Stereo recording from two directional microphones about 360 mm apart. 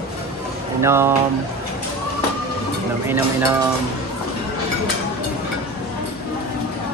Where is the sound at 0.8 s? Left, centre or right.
Centre.